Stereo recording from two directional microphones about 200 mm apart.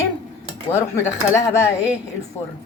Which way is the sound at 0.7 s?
10° left (ahead or behind).